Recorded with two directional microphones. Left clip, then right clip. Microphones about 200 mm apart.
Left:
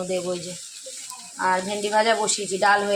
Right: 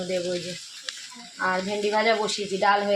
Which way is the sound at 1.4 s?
10° left (ahead or behind).